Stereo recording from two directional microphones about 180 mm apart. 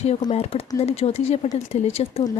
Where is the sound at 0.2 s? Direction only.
35° left (ahead or behind).